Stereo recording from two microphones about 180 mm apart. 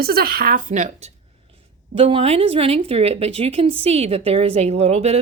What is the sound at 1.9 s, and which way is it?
Speech, 30° right (ahead or behind).